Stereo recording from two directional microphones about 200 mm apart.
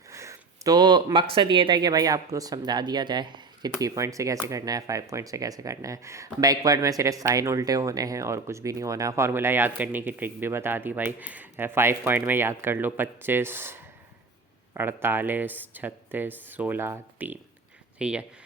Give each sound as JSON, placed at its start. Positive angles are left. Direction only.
{"t": 0.1, "sound": "speech", "side_deg": -15}